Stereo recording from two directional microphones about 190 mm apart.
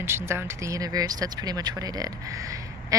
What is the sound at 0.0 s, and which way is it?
Speech, 15° right (ahead or behind).